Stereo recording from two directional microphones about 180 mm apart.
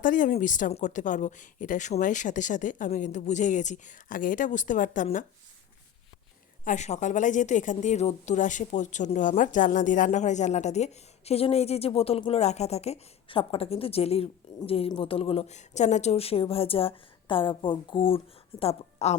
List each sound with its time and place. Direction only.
0.0 s speech: 45° left (ahead or behind)
6.7 s a woman's voice: 40° left (ahead or behind)